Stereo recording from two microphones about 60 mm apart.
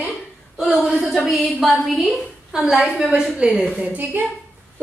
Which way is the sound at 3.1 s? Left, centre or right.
Centre.